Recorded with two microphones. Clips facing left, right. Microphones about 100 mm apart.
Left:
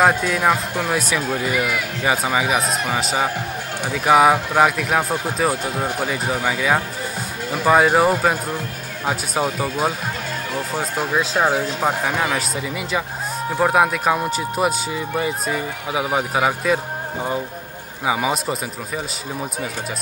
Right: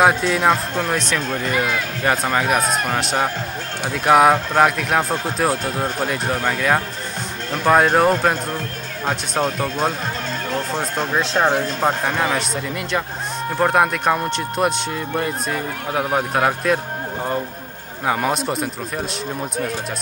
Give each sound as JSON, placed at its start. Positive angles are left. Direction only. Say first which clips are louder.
{"t": 0.0, "sound": "speech", "louder": "right 1 dB", "side_deg": 0}
{"t": 1.5, "sound": "speech", "louder": "right 3 dB", "side_deg": -30}
{"t": 2.0, "sound": "speech", "louder": "right 1 dB", "side_deg": 5}